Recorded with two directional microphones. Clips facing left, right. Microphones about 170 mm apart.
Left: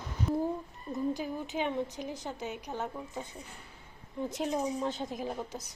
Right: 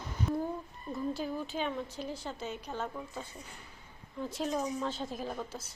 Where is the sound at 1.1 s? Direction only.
15° left (ahead or behind).